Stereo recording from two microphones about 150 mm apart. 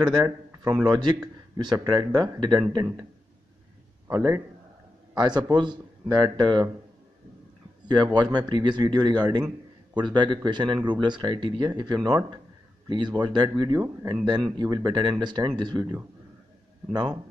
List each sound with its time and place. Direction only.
0.0 s speech: 30° right (ahead or behind)
4.1 s a man's voice: 15° right (ahead or behind)
5.1 s speech: 30° right (ahead or behind)
7.9 s speech: 30° right (ahead or behind)